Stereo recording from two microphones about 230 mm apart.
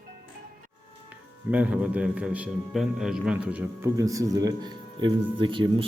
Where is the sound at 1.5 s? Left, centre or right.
Centre.